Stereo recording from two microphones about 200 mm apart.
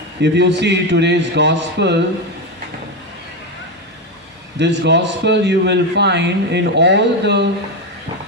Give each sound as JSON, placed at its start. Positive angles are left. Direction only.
{"t": 0.2, "sound": "a man's voice", "side_deg": -60}
{"t": 4.5, "sound": "a man's voice", "side_deg": -60}